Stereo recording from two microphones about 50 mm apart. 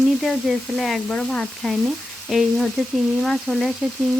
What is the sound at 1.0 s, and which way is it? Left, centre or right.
Sizzle, centre.